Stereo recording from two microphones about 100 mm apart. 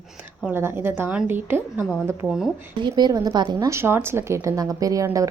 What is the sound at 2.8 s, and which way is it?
Speech, 45° right (ahead or behind).